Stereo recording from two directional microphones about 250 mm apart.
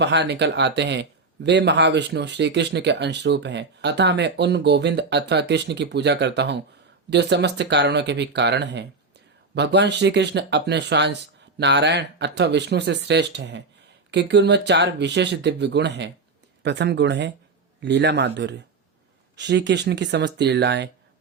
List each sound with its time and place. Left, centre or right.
0.0 s speech: right